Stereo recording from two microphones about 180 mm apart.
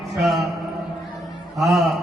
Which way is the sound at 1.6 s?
20° right (ahead or behind).